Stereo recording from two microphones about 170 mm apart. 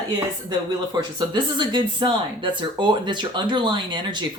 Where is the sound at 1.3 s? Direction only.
25° right (ahead or behind).